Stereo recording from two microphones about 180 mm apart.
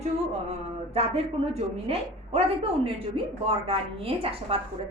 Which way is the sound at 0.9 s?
35° right (ahead or behind).